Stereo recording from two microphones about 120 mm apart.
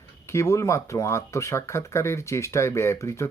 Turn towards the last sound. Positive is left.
turn(degrees=25)  # may be behind; listen again after turning